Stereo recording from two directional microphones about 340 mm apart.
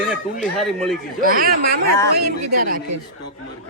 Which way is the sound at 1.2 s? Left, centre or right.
Right.